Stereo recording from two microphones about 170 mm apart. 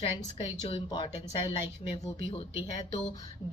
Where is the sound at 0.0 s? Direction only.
35° left (ahead or behind).